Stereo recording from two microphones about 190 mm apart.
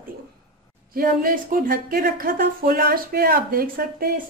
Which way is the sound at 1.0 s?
50° right (ahead or behind).